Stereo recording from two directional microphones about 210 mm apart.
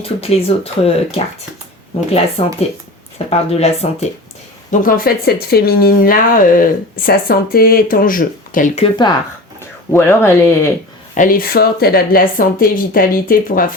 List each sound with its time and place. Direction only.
0.0 s speech: 30° left (ahead or behind)
4.7 s speech: 40° left (ahead or behind); by 9.1 s 25° left (ahead or behind)
9.6 s speech: 10° left (ahead or behind)
11.2 s speech: 40° left (ahead or behind)